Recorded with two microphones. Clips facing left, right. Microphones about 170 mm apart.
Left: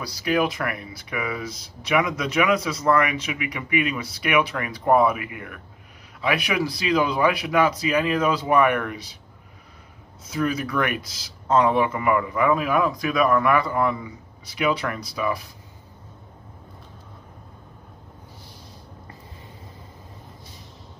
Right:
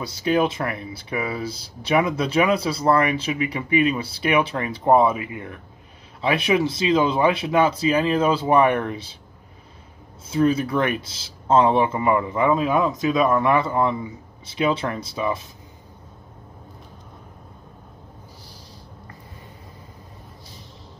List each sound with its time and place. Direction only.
0.0 s speech: 25° right (ahead or behind)
10.2 s speech: 25° right (ahead or behind)